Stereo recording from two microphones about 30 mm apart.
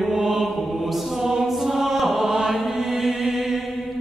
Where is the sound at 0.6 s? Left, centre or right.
Centre.